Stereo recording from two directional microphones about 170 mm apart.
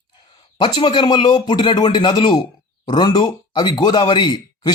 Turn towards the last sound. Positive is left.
turn(degrees=25)  # may be behind; listen again after turning